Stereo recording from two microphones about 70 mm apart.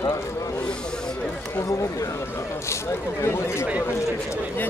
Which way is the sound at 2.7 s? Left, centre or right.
Left.